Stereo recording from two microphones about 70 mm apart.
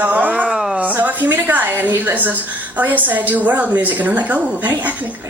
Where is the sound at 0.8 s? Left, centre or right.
Right.